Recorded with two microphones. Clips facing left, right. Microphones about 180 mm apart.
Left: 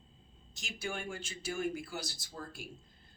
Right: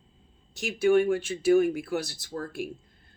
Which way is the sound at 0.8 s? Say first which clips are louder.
Right 19 dB; 65° right (ahead or behind).